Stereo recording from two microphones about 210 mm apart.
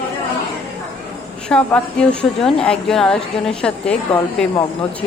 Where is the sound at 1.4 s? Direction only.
5° left (ahead or behind).